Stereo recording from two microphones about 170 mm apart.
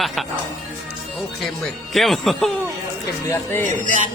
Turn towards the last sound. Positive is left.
turn(degrees=-50)  # may be behind; listen again after turning